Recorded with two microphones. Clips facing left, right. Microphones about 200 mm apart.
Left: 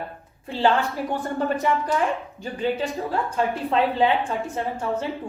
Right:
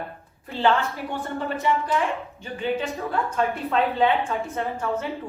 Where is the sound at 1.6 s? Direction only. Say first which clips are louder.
Right 3 dB; 50° left (ahead or behind).